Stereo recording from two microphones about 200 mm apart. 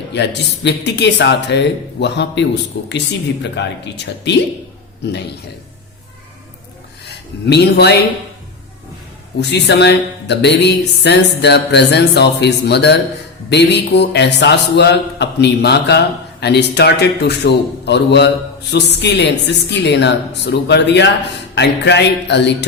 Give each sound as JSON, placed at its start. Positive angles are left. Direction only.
{"t": 0.1, "sound": "a man's voice", "side_deg": 60}
{"t": 7.4, "sound": "a man's voice", "side_deg": 55}
{"t": 9.4, "sound": "a man's voice", "side_deg": 60}